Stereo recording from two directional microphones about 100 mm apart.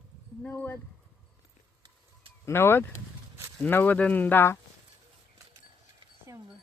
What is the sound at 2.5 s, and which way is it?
Speech, 25° left (ahead or behind).